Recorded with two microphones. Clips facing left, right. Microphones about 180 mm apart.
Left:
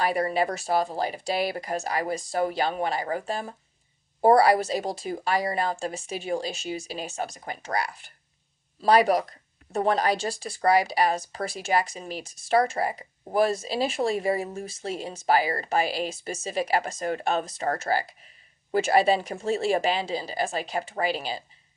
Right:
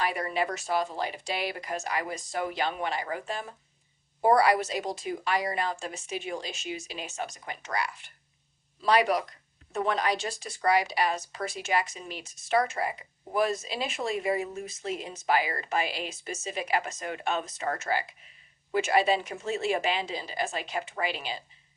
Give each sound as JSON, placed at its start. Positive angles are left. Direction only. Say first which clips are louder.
{"t": 0.0, "sound": "speech", "louder": "left 5 dB", "side_deg": 35}